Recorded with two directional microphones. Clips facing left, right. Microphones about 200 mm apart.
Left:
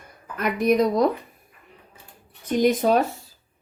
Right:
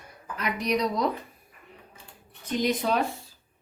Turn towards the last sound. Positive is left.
turn(degrees=45)  # may be behind; listen again after turning